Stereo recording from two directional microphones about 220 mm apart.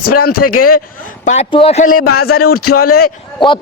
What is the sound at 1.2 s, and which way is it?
A man's voice, 25° left (ahead or behind).